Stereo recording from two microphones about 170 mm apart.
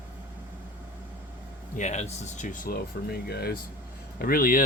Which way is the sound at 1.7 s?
45° left (ahead or behind).